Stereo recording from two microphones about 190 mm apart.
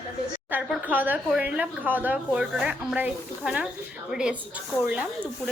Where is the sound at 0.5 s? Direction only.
10° right (ahead or behind).